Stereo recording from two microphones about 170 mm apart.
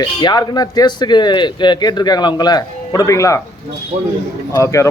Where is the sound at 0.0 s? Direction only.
25° left (ahead or behind).